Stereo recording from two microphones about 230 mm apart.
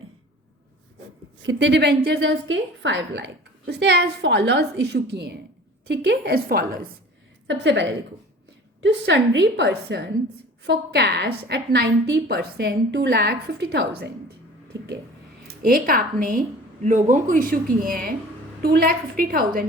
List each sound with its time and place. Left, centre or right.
1.4 s a woman's voice: right
7.4 s a woman's voice: right
15.4 s speech: right